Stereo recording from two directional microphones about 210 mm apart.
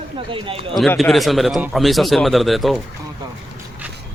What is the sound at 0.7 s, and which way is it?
Speech, centre (ahead or behind).